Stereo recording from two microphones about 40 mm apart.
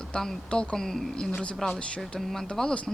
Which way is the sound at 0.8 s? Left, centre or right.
Centre.